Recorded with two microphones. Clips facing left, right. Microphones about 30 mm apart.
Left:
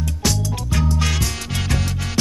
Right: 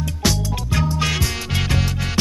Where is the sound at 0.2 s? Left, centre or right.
Centre.